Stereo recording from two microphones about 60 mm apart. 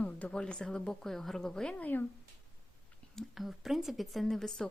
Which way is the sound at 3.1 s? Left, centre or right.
Centre.